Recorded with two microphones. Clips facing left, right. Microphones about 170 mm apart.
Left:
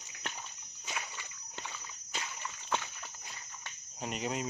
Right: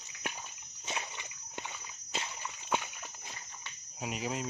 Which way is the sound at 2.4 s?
15° right (ahead or behind).